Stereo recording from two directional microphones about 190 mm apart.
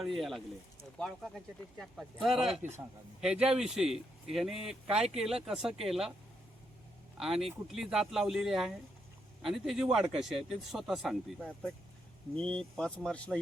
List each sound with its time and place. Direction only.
0.0 s speech: centre (ahead or behind)
7.2 s speech: centre (ahead or behind)